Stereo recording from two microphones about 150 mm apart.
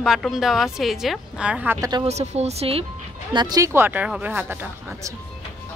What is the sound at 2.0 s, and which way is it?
Speech, 45° right (ahead or behind).